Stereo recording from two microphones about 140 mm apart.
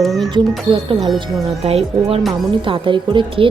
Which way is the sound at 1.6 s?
45° right (ahead or behind).